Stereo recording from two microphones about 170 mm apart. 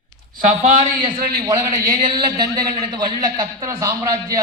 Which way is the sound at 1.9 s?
30° right (ahead or behind).